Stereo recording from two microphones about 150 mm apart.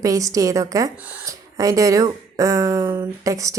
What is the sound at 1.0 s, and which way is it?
A woman's voice, 10° right (ahead or behind).